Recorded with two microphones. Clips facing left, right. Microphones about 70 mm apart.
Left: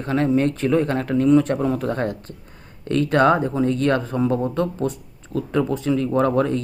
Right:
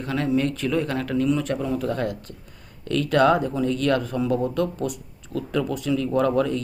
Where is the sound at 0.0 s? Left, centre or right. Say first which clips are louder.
Left 4 dB; left.